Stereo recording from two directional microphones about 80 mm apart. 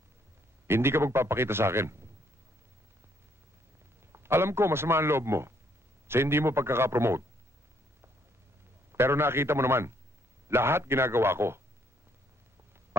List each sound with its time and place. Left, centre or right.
0.7 s a man's voice: right
4.1 s a man's voice: right
8.9 s a man's voice: right